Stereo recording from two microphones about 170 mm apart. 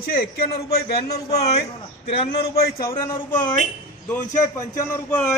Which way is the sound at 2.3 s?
70° left (ahead or behind).